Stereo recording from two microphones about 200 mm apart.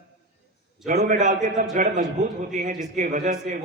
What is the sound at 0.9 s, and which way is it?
A man's voice, 35° right (ahead or behind).